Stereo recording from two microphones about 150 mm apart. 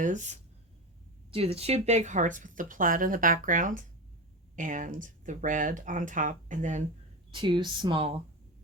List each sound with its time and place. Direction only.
0.0 s speech: 55° right (ahead or behind)
1.3 s speech: 40° right (ahead or behind)
7.3 s speech: 35° right (ahead or behind)